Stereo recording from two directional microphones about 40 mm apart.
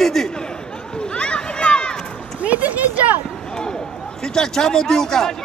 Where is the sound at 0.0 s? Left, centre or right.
Centre.